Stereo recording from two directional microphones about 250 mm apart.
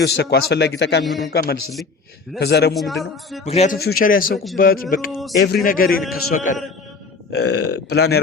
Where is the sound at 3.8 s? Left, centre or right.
Left.